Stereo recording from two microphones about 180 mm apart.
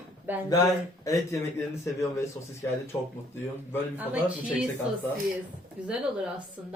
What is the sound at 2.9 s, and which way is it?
Speech, 15° left (ahead or behind).